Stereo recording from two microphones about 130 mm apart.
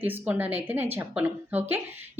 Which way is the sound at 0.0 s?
15° right (ahead or behind).